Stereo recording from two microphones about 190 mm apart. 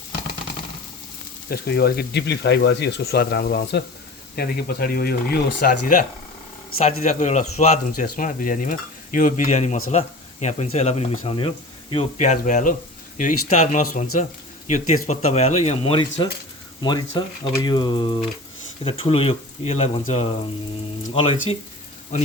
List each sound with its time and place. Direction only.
1.5 s speech: 55° left (ahead or behind); by 21.3 s 30° left (ahead or behind)